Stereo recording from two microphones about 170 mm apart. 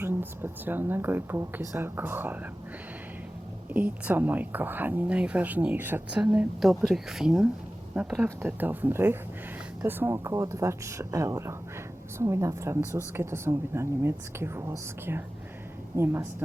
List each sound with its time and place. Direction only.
0.0 s a woman's voice: 10° right (ahead or behind)
3.7 s a woman's voice: 10° right (ahead or behind)